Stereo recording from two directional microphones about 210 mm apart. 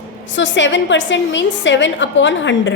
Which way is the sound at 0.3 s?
60° left (ahead or behind).